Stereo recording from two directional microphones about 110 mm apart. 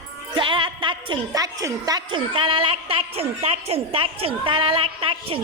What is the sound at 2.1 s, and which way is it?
A woman's voice, 50° right (ahead or behind).